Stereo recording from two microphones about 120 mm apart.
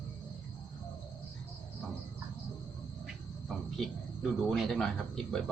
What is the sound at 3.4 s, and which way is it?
Speech, centre (ahead or behind).